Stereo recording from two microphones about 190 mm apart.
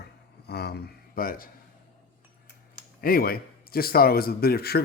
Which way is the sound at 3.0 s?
50° left (ahead or behind).